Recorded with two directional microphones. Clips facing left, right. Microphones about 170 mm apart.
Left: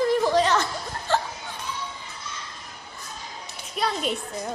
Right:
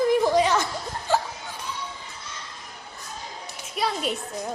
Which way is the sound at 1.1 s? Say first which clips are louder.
Right 1 dB; 10° right (ahead or behind).